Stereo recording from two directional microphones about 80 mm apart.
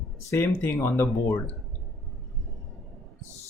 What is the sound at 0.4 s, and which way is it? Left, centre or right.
Speech, left.